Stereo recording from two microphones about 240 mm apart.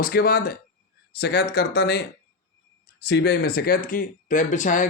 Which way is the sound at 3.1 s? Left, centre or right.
Left.